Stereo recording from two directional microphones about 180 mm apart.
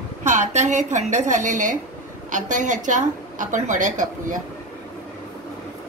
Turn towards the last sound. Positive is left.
turn(degrees=-45)  # may be behind; listen again after turning